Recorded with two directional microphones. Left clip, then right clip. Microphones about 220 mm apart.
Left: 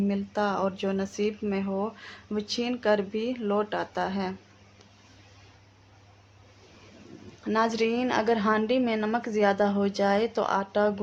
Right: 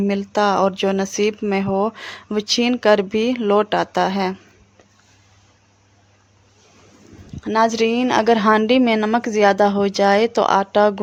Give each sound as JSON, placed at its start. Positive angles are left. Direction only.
{"t": 0.1, "sound": "speech", "side_deg": -45}
{"t": 7.4, "sound": "a woman's voice", "side_deg": -35}